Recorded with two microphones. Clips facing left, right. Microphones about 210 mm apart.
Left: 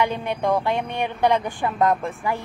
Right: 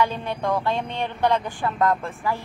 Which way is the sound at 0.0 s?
15° left (ahead or behind).